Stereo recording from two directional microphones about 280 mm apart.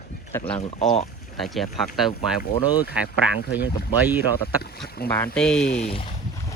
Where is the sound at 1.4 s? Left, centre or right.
Centre.